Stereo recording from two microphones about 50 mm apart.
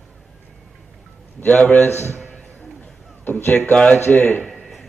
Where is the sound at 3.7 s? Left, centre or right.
Left.